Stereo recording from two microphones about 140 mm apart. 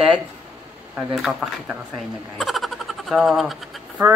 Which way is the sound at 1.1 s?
Centre (ahead or behind).